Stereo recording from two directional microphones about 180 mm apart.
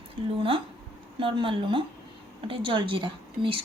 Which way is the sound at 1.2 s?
30° right (ahead or behind).